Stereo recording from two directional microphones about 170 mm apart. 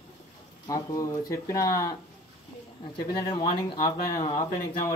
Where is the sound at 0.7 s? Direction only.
20° left (ahead or behind).